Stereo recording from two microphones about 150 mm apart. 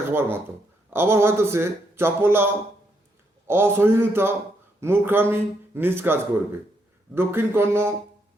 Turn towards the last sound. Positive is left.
turn(degrees=-15)  # may be behind; listen again after turning